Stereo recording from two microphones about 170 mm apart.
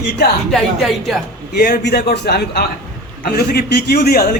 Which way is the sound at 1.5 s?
65° left (ahead or behind).